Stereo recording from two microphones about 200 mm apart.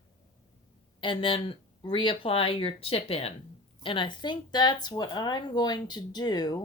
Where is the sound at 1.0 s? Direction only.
25° left (ahead or behind).